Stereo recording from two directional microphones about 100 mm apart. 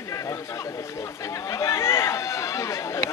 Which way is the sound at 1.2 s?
30° left (ahead or behind).